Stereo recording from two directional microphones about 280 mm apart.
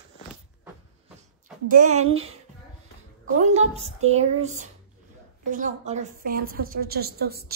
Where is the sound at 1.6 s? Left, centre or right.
Right.